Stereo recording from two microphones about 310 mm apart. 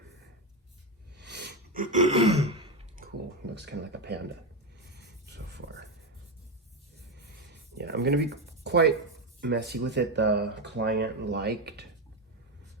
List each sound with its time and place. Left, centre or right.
1.1 s a sound: right
3.5 s speech: right
4.9 s writing: right
7.2 s writing: right
9.4 s speech: right